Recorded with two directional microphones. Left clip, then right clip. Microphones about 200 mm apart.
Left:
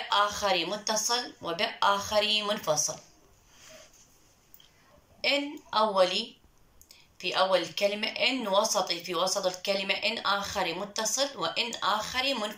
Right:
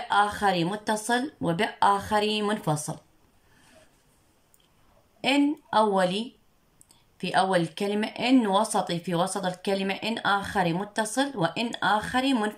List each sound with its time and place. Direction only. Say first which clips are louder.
0.1 s speech: right 3 dB; 60° right (ahead or behind)
5.2 s speech: right 4 dB; 60° right (ahead or behind)